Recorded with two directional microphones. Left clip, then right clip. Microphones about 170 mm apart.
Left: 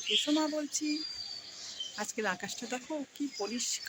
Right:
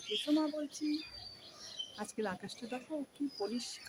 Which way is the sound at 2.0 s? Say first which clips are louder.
Left 6 dB; 15° left (ahead or behind).